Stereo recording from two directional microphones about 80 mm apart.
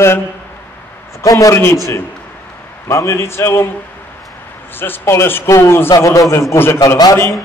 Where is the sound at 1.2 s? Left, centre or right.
Left.